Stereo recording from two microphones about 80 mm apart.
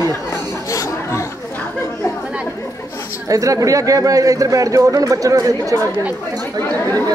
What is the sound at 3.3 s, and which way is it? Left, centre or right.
Speech, right.